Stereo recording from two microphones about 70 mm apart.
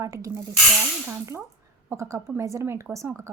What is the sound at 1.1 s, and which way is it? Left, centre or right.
Speech, right.